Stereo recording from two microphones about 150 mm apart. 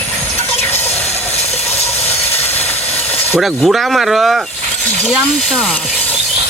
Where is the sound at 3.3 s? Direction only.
Centre (ahead or behind).